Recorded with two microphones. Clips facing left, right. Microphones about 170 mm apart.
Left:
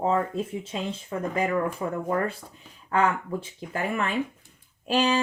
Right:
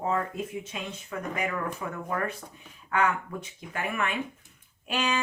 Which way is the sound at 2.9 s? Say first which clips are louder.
Left 3 dB; 35° left (ahead or behind).